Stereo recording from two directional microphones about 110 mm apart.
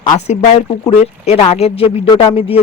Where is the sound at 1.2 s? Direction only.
60° left (ahead or behind).